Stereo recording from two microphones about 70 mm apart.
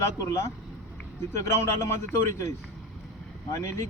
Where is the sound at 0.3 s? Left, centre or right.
Left.